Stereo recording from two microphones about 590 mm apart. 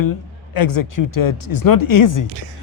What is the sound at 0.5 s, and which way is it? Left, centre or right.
Speech, left.